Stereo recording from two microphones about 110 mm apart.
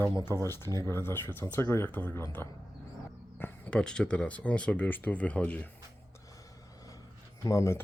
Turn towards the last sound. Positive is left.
turn(degrees=25)  # may be behind; listen again after turning